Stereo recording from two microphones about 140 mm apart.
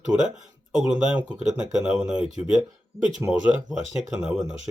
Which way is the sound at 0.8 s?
5° right (ahead or behind).